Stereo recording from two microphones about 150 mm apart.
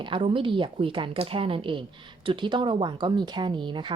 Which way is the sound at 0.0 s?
35° right (ahead or behind).